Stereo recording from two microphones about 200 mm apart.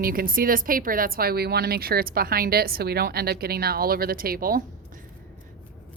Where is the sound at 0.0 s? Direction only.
45° right (ahead or behind).